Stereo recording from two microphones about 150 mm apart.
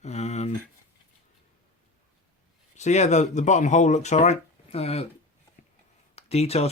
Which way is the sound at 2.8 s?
50° left (ahead or behind).